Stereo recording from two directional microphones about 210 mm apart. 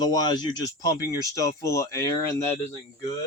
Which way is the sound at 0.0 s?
20° left (ahead or behind).